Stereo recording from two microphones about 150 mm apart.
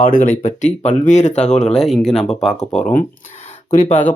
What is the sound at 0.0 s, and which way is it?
Speech, 65° left (ahead or behind).